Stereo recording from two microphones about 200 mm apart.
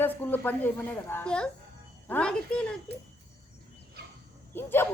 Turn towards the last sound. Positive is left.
turn(degrees=10)  # may be behind; listen again after turning